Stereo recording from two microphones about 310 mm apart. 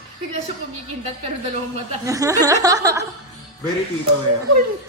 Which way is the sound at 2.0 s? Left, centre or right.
Centre.